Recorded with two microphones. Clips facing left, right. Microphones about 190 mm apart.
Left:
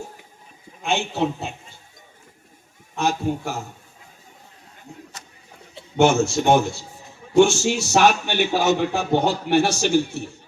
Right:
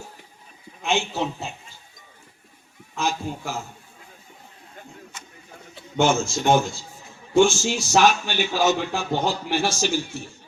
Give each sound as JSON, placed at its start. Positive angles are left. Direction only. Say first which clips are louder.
{"t": 0.8, "sound": "a man's voice", "louder": "left 2 dB", "side_deg": 55}
{"t": 2.9, "sound": "a man's voice", "louder": "left 4 dB", "side_deg": 60}
{"t": 6.0, "sound": "a man's voice", "louder": "left 4 dB", "side_deg": 65}